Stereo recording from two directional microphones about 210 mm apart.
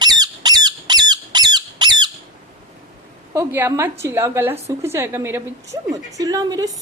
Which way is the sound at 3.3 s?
10° right (ahead or behind).